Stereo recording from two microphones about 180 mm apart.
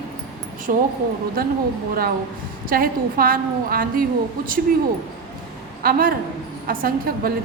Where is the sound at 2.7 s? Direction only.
55° right (ahead or behind).